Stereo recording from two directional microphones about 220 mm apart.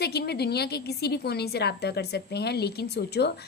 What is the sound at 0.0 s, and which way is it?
A woman's voice, 45° left (ahead or behind).